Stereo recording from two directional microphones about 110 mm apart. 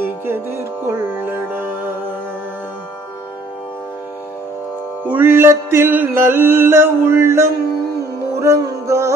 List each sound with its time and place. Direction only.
0.0 s music: 20° right (ahead or behind)
5.0 s music: 20° right (ahead or behind)